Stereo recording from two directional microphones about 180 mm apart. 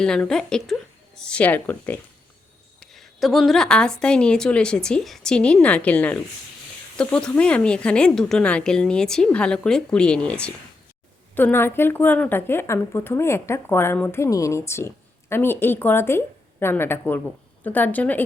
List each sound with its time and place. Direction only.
0.0 s a woman's voice: 5° left (ahead or behind)